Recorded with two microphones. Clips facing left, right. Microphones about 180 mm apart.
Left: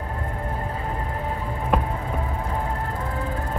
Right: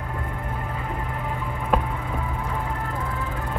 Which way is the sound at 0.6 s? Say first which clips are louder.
Left 1 dB; 35° left (ahead or behind).